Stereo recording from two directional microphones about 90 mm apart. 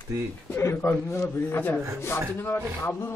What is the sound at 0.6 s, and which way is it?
Speech, 25° left (ahead or behind).